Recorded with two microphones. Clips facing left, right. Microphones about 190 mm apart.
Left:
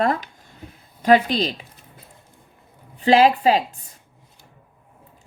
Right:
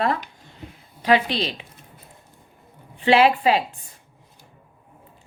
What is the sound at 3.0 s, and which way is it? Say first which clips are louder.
Speech: left 2 dB; 40° left (ahead or behind).